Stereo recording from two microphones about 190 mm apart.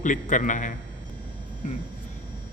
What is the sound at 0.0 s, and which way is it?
Speech, 40° left (ahead or behind).